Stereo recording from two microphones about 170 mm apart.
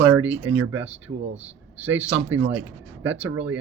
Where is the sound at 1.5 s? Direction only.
10° right (ahead or behind).